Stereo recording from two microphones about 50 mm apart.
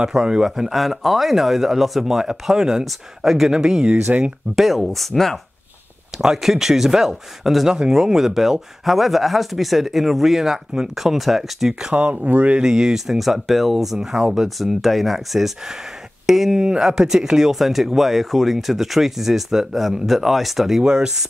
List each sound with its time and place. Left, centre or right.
0.0 s speech: centre
4.2 s speech: centre
6.1 s speech: centre
11.9 s speech: right
12.5 s speech: centre
20.8 s speech: centre